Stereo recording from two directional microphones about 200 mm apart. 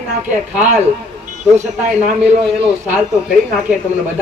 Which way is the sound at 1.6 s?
35° right (ahead or behind).